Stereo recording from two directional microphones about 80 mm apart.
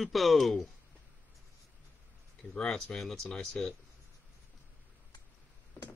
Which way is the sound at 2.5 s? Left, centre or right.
Centre.